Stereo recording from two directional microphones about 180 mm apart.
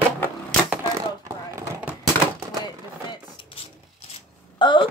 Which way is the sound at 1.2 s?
15° right (ahead or behind).